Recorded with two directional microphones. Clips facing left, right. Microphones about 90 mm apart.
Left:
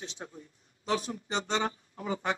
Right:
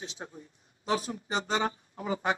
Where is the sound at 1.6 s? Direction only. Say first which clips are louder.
Right 1 dB; 25° right (ahead or behind).